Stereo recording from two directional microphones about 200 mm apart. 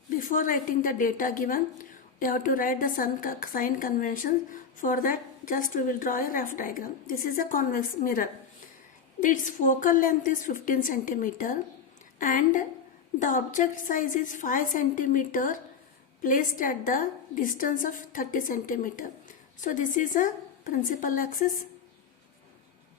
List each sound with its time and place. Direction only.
0.2 s a woman's voice: 40° left (ahead or behind)